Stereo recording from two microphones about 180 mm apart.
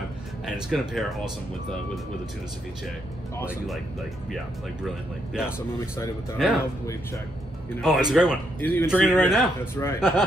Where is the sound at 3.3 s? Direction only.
15° left (ahead or behind).